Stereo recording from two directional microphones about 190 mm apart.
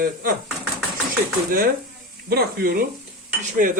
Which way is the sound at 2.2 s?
55° right (ahead or behind).